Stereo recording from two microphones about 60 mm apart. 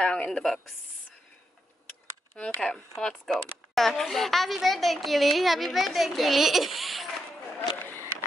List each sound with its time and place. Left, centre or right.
0.0 s a woman's voice: centre
2.3 s a woman's voice: centre
7.5 s a sound: left